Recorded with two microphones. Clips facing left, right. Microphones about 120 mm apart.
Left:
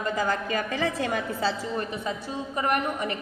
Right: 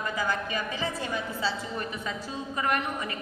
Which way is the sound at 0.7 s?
60° left (ahead or behind).